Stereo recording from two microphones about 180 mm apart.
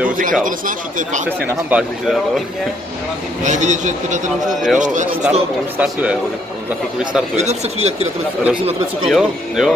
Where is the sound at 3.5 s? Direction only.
45° right (ahead or behind).